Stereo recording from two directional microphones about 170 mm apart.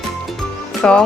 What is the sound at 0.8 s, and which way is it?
Speech, 5° left (ahead or behind).